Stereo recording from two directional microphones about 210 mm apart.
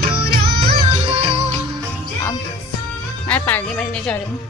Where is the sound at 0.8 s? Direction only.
25° right (ahead or behind).